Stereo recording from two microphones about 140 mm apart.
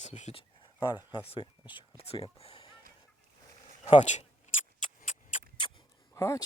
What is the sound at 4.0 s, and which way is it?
Speech, 55° left (ahead or behind).